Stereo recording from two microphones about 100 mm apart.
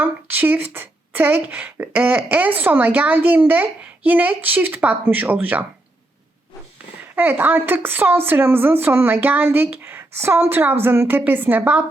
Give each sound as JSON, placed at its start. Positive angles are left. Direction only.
{"t": 0.0, "sound": "speech", "side_deg": -20}
{"t": 7.2, "sound": "speech", "side_deg": -20}